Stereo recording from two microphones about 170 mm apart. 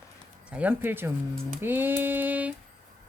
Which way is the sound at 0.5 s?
10° right (ahead or behind).